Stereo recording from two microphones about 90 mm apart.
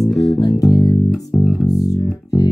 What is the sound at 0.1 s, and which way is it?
Music, 40° left (ahead or behind).